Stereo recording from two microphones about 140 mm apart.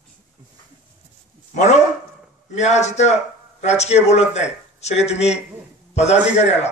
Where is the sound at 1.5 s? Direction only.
60° left (ahead or behind).